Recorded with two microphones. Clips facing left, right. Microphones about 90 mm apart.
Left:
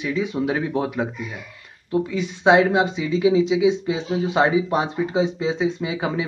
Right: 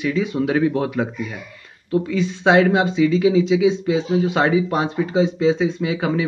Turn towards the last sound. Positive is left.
turn(degrees=20)  # may be behind; listen again after turning